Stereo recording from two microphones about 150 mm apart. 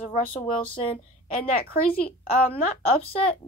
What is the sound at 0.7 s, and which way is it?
Speech, 35° left (ahead or behind).